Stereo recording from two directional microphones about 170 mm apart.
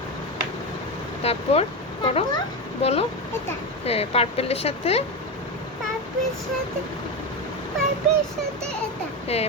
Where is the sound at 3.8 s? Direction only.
35° left (ahead or behind).